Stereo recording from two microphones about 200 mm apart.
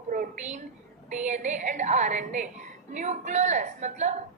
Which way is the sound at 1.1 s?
35° right (ahead or behind).